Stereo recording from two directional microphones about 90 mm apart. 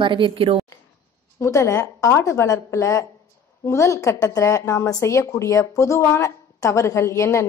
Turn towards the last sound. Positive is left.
turn(degrees=30)  # may be behind; listen again after turning